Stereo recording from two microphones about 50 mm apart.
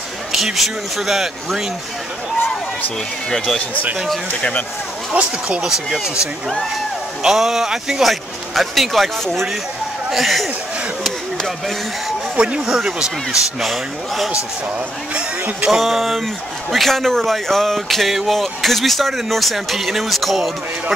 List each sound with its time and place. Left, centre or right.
0.3 s speech: centre
3.3 s speech: centre
5.1 s speech: right
5.6 s speech: centre
7.2 s speech: centre
12.4 s speech: right; by 14.3 s centre
15.1 s speech: right
15.7 s speech: centre